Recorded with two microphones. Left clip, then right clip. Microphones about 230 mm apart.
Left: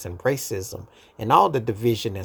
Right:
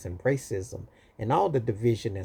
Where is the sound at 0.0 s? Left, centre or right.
Centre.